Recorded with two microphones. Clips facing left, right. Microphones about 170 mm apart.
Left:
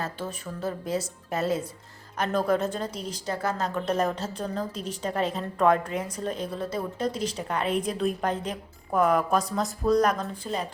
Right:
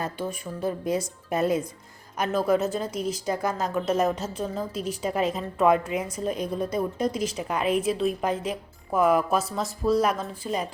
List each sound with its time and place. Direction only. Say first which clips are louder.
0.0 s a woman's voice: right 3 dB; 15° right (ahead or behind)